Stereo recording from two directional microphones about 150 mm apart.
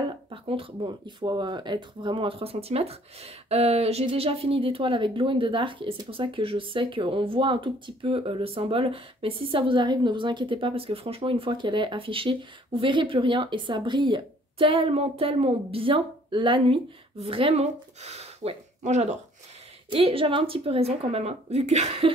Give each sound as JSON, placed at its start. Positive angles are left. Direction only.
{"t": 0.3, "sound": "speech", "side_deg": -35}
{"t": 19.9, "sound": "speech", "side_deg": -40}